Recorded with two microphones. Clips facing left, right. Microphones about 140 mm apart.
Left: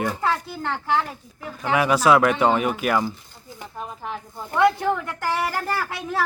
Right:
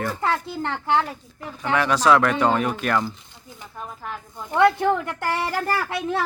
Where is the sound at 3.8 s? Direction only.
20° left (ahead or behind).